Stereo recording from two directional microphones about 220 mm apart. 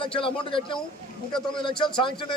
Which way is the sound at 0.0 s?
25° left (ahead or behind).